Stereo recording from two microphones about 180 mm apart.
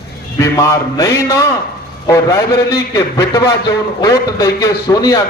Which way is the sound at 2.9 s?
20° left (ahead or behind).